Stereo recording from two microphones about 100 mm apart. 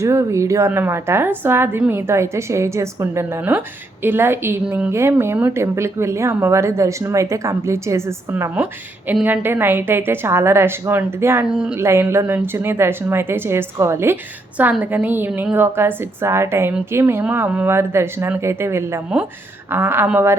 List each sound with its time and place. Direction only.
0.0 s speech: 30° right (ahead or behind)
11.4 s a woman's voice: 10° right (ahead or behind)
11.8 s a woman's voice: 25° right (ahead or behind)